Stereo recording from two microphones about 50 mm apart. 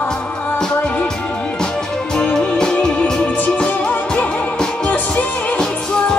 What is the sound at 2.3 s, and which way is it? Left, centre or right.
Music, centre.